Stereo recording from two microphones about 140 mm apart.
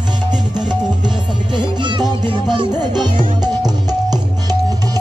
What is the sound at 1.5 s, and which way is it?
Music, 35° right (ahead or behind).